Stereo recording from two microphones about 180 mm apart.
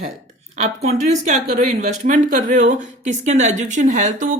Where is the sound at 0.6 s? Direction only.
35° right (ahead or behind).